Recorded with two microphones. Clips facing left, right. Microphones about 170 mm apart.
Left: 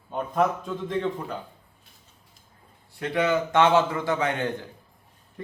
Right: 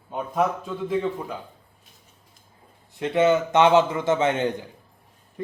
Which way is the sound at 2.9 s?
25° right (ahead or behind).